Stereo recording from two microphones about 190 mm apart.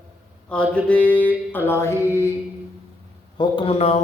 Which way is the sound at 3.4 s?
30° left (ahead or behind).